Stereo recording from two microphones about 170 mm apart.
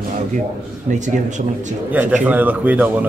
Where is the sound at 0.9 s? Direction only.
45° right (ahead or behind).